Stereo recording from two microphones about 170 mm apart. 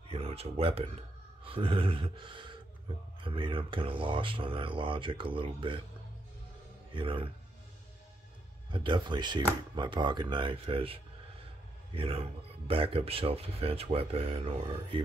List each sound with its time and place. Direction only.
0.1 s speech: 35° right (ahead or behind)
6.9 s speech: 30° right (ahead or behind)
8.7 s speech: 30° right (ahead or behind)